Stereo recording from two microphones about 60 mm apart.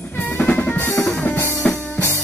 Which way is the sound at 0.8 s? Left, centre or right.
Left.